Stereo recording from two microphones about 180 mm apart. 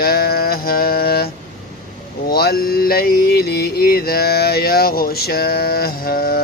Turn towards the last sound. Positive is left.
turn(degrees=55)  # may be behind; listen again after turning